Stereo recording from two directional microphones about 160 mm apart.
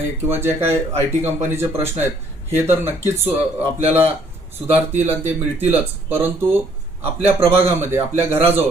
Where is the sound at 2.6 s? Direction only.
15° right (ahead or behind).